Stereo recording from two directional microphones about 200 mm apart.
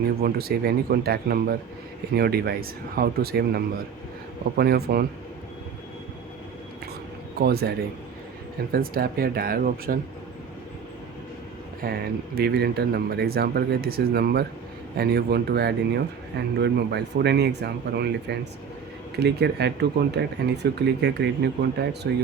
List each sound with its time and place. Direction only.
0.2 s speech: 50° right (ahead or behind)
7.3 s speech: 50° right (ahead or behind)
8.7 s speech: 50° right (ahead or behind)
11.8 s speech: 50° right (ahead or behind)